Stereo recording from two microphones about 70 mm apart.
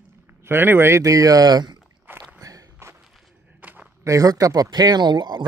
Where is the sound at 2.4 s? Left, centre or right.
Right.